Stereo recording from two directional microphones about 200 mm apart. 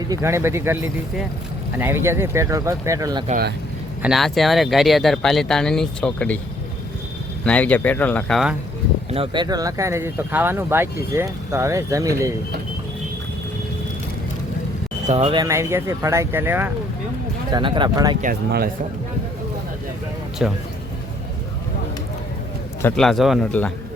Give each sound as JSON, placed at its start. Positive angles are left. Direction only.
{"t": 0.1, "sound": "speech", "side_deg": -15}
{"t": 3.2, "sound": "speech", "side_deg": -45}
{"t": 4.0, "sound": "speech", "side_deg": 0}
{"t": 7.4, "sound": "speech", "side_deg": 5}
{"t": 9.1, "sound": "speech", "side_deg": -25}
{"t": 15.0, "sound": "speech", "side_deg": -30}
{"t": 17.5, "sound": "speech", "side_deg": -25}
{"t": 18.2, "sound": "speech", "side_deg": -45}
{"t": 20.4, "sound": "speech", "side_deg": -5}
{"t": 22.8, "sound": "speech", "side_deg": 5}